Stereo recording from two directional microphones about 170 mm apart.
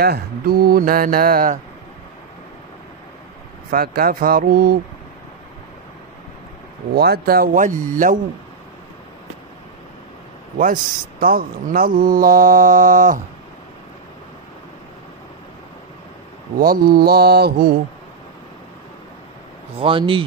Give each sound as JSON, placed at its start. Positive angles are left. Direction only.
{"t": 0.0, "sound": "speech", "side_deg": -65}
{"t": 3.7, "sound": "speech", "side_deg": -60}
{"t": 6.9, "sound": "speech", "side_deg": -65}
{"t": 10.6, "sound": "speech", "side_deg": -55}
{"t": 16.5, "sound": "speech", "side_deg": -60}
{"t": 19.8, "sound": "speech", "side_deg": -30}